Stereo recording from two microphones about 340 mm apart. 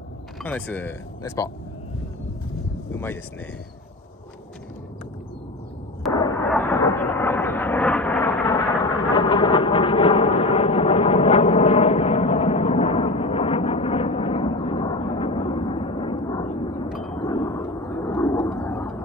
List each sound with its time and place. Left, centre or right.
0.4 s speech: centre
2.9 s speech: centre
6.1 s a sound: centre